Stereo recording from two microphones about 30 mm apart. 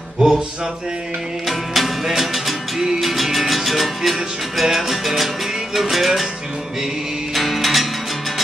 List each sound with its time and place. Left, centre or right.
0.2 s music: right
1.7 s music: centre
7.3 s music: centre